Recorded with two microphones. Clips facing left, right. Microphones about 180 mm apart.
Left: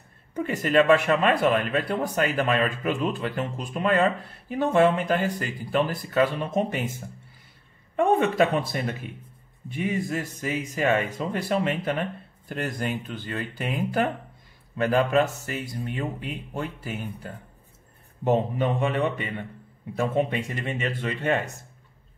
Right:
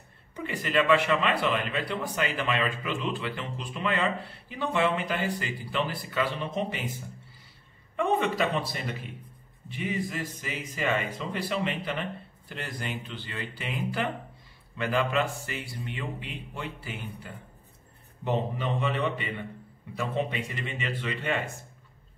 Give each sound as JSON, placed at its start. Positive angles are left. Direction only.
{"t": 0.4, "sound": "speech", "side_deg": 45}
{"t": 7.9, "sound": "speech", "side_deg": 50}
{"t": 18.2, "sound": "speech", "side_deg": 45}